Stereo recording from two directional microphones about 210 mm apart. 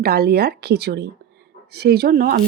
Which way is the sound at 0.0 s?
50° right (ahead or behind).